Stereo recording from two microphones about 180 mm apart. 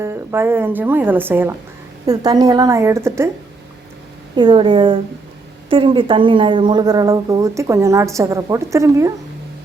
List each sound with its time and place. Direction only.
0.0 s speech: 15° right (ahead or behind)
4.4 s speech: 25° right (ahead or behind)